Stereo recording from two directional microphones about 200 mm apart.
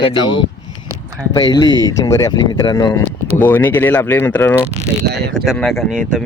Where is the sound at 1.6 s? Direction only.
70° left (ahead or behind).